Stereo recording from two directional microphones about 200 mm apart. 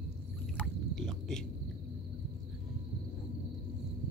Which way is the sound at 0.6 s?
Centre (ahead or behind).